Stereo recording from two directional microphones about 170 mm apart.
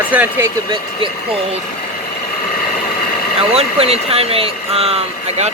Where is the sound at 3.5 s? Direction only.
35° right (ahead or behind).